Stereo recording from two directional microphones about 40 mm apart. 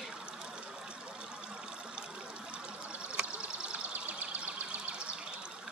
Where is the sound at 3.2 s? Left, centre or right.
Right.